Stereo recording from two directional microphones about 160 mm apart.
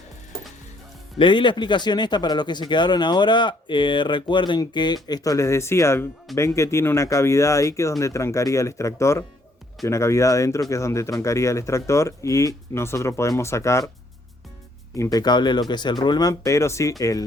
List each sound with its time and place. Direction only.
1.2 s speech: 30° left (ahead or behind)
14.9 s speech: 20° left (ahead or behind)